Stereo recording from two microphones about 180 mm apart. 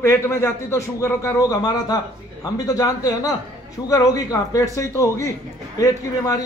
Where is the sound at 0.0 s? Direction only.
15° left (ahead or behind).